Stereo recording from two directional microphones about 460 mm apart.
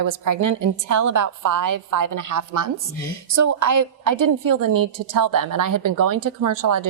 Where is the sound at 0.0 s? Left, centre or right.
Right.